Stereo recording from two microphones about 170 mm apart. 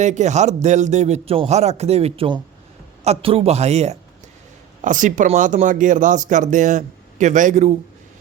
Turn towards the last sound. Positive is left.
turn(degrees=-45)  # may be behind; listen again after turning